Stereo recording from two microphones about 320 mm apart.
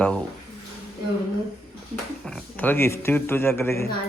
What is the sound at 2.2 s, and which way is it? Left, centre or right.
Speech, centre.